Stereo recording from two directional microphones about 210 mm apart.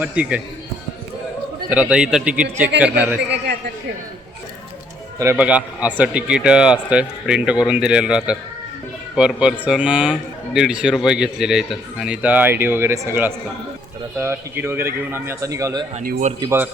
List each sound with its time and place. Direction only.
0.0 s a man's voice: 5° right (ahead or behind)
1.7 s a man's voice: 5° right (ahead or behind)
5.2 s a man's voice: 10° right (ahead or behind)
16.0 s speech: 35° right (ahead or behind)
16.4 s a man's voice: 10° right (ahead or behind)